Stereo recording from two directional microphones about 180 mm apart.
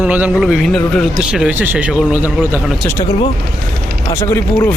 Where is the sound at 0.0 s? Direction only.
5° right (ahead or behind).